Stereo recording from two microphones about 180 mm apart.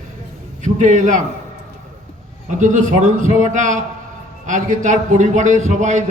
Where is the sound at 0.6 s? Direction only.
40° right (ahead or behind).